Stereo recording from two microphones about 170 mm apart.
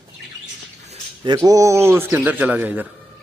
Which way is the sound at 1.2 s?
20° right (ahead or behind).